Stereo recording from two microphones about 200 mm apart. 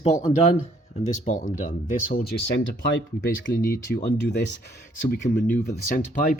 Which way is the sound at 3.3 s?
45° left (ahead or behind).